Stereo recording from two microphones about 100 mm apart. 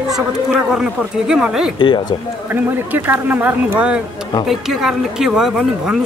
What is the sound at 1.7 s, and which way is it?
Speech, 55° left (ahead or behind).